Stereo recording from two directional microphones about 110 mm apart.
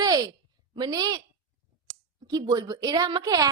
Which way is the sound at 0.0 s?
40° right (ahead or behind).